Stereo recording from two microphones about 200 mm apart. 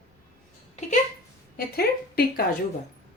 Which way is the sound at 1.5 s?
50° left (ahead or behind).